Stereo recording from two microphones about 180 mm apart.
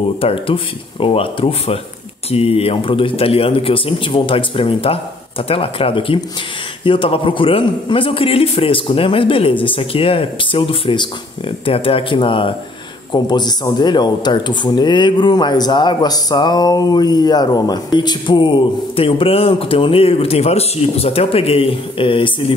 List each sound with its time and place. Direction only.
0.2 s a man's voice: 30° left (ahead or behind)